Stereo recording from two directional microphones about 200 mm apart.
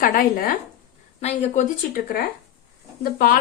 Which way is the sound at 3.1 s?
45° left (ahead or behind).